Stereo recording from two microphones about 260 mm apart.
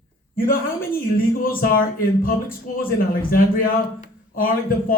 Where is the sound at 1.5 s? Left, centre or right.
Left.